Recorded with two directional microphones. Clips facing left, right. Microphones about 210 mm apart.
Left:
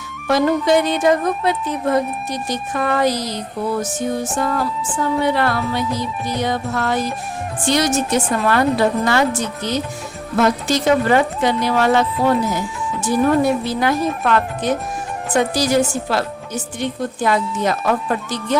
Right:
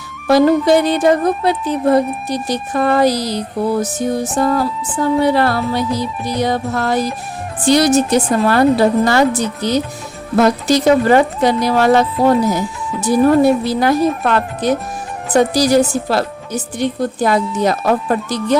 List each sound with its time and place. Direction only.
0.3 s speech: 35° right (ahead or behind)